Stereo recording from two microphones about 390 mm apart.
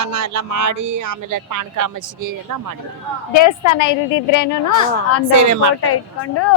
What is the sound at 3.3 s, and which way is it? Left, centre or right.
A woman's voice, left.